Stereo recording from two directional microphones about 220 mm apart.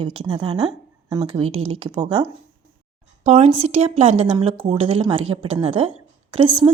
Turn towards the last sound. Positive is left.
turn(degrees=-25)  # may be behind; listen again after turning